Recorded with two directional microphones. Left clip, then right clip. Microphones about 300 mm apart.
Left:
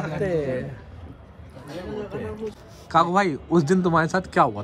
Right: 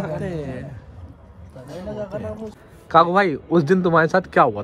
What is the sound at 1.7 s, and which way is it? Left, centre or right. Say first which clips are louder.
Speech: right 2 dB; right.